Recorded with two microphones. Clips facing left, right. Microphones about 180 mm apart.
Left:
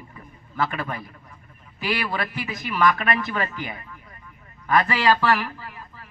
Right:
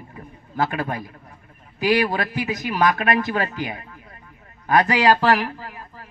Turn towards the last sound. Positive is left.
turn(degrees=-45)  # may be behind; listen again after turning